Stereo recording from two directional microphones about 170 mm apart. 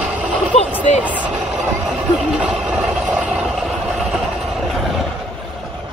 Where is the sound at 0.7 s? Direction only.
10° right (ahead or behind).